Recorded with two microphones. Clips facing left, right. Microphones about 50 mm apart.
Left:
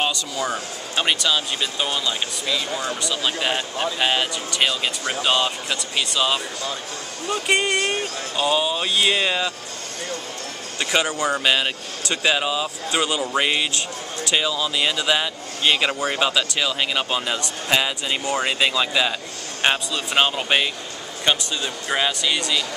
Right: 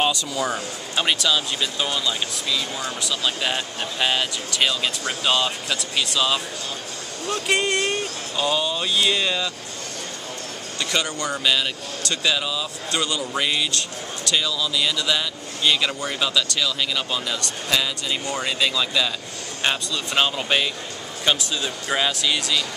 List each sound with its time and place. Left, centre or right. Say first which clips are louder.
0.0 s speech: right 1 dB; centre
8.8 s speech: left 1 dB; left
10.8 s speech: left 4 dB; centre
11.4 s speech: left 2 dB; left
12.9 s speech: left 3 dB; centre
21.3 s speech: left 1 dB; centre